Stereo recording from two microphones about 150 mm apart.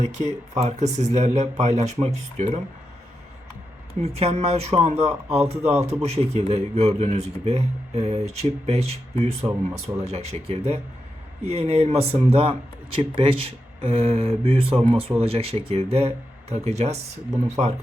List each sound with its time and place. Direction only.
0.0 s speech: 50° right (ahead or behind)
4.0 s speech: 45° right (ahead or behind)